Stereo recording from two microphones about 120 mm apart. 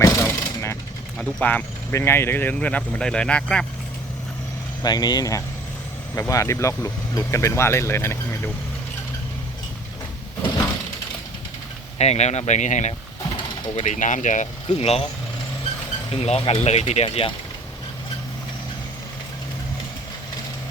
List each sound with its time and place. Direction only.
0.0 s mechanisms: 25° left (ahead or behind)
1.2 s speech: 10° left (ahead or behind)
4.8 s speech: 35° left (ahead or behind)
11.9 s speech: 65° left (ahead or behind); by 14.8 s 90° left
14.8 s speech: 55° left (ahead or behind)
16.1 s speech: 60° left (ahead or behind)